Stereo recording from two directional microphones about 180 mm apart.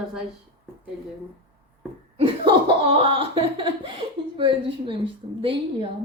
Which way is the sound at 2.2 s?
30° right (ahead or behind).